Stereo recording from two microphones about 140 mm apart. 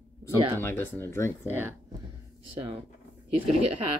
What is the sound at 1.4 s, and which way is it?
Speech, 15° right (ahead or behind).